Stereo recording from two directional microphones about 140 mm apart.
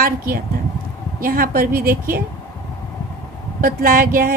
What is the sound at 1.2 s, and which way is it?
Speech, 90° right.